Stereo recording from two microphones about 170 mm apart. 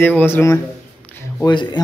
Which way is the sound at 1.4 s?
25° left (ahead or behind).